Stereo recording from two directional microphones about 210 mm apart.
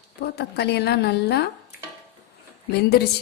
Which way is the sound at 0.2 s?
50° left (ahead or behind).